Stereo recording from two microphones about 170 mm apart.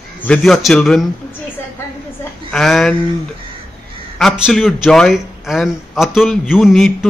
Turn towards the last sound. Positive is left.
turn(degrees=0)  # may be behind; listen again after turning